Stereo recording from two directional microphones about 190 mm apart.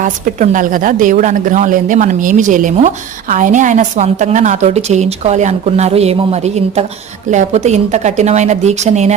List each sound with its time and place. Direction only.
0.0 s speech: 40° right (ahead or behind)